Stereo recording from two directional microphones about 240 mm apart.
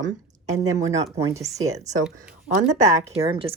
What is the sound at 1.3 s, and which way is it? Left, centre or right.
Speech, centre.